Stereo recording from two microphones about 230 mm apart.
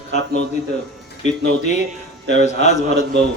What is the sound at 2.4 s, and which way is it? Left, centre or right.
Speech, left.